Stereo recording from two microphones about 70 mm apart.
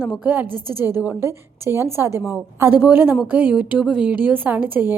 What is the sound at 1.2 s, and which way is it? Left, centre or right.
A woman's voice, right.